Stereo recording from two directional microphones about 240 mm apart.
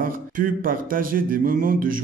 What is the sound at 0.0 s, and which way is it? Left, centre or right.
A man's voice, right.